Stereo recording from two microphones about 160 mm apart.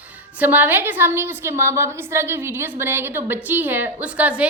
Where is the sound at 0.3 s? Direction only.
10° right (ahead or behind).